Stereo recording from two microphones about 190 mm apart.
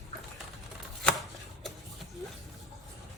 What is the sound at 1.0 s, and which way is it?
Chopping, centre (ahead or behind).